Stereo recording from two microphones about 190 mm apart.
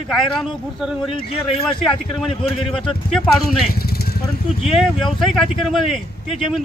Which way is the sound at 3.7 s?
55° left (ahead or behind).